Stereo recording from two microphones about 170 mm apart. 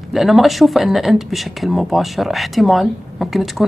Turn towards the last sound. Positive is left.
turn(degrees=0)  # may be behind; listen again after turning